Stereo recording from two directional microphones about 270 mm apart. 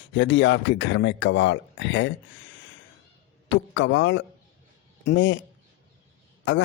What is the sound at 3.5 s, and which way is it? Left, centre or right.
Speech, left.